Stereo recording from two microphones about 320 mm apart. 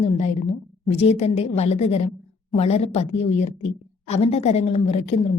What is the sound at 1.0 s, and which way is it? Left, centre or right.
Speech, centre.